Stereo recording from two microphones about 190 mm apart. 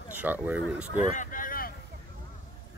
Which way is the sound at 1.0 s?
45° left (ahead or behind).